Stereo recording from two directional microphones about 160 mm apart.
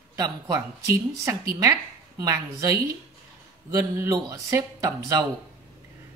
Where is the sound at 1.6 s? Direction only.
20° right (ahead or behind).